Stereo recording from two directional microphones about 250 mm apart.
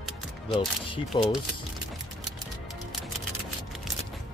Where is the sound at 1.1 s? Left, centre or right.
Centre.